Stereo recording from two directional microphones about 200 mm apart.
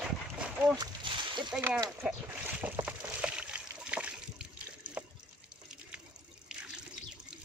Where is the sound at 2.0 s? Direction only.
5° right (ahead or behind).